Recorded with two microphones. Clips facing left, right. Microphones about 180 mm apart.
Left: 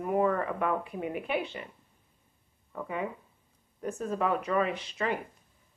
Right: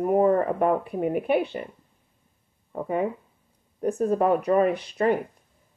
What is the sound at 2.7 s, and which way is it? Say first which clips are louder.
Speech: right 8 dB; 40° right (ahead or behind).